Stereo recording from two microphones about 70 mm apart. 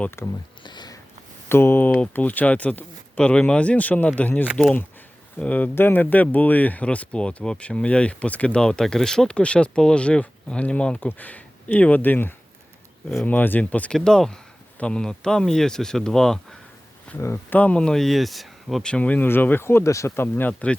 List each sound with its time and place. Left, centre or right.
0.2 s speech: left
0.6 s a sound: left
1.5 s speech: left
13.9 s speech: centre
17.1 s speech: centre
18.8 s speech: centre; by 20.2 s left
20.2 s speech: left